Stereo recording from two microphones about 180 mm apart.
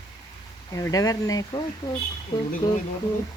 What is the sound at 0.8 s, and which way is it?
Speech, 20° left (ahead or behind).